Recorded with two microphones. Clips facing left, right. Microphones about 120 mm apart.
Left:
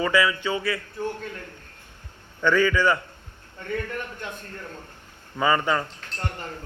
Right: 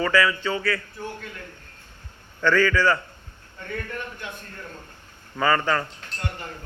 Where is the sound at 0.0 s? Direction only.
15° left (ahead or behind).